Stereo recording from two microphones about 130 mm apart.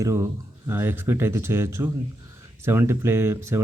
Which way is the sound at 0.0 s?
20° right (ahead or behind).